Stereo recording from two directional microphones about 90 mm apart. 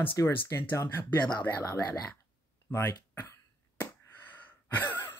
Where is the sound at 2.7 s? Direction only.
30° left (ahead or behind).